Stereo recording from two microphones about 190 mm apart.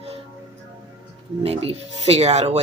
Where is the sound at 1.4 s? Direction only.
30° right (ahead or behind).